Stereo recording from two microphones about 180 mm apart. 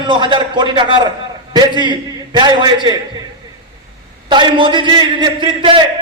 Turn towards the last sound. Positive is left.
turn(degrees=-25)  # may be behind; listen again after turning